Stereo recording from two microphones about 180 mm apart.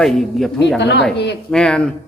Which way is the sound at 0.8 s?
70° left (ahead or behind).